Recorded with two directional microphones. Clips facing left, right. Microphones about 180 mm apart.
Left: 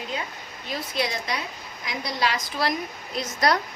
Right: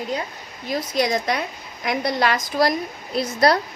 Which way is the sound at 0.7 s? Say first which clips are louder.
Right 7 dB; 45° right (ahead or behind).